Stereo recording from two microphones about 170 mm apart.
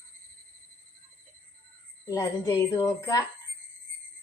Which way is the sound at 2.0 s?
20° left (ahead or behind).